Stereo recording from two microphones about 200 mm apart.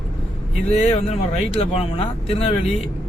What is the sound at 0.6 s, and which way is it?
Speech, 35° left (ahead or behind).